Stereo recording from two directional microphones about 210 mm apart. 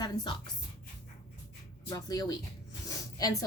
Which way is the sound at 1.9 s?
20° left (ahead or behind).